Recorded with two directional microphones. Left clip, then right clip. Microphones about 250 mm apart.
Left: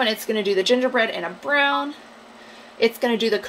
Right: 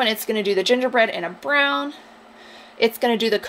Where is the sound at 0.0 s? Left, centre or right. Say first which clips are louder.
Right 1 dB; right.